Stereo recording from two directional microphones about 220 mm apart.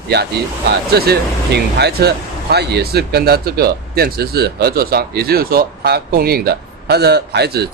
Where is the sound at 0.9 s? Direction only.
45° right (ahead or behind).